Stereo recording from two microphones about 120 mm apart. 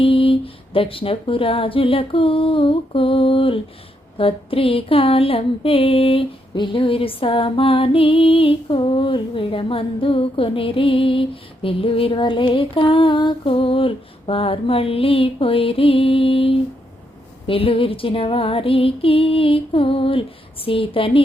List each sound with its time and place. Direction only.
0.0 s music: 50° left (ahead or behind)